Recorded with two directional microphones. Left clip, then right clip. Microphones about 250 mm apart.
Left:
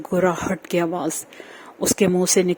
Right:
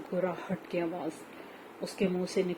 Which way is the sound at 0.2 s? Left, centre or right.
Left.